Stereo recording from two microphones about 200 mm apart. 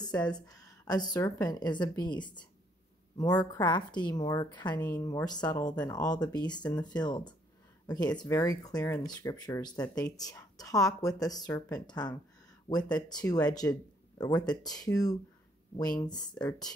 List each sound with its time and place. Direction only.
0.0 s speech: 20° left (ahead or behind)
4.8 s speech: 10° left (ahead or behind); by 12.8 s 30° left (ahead or behind)
13.3 s speech: 20° left (ahead or behind)